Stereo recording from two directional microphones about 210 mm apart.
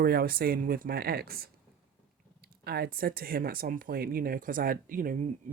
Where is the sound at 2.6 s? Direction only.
45° right (ahead or behind).